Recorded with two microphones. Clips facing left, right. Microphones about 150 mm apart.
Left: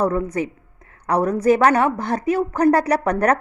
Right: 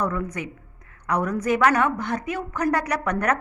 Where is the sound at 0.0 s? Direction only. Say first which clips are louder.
Left 6 dB; 30° left (ahead or behind).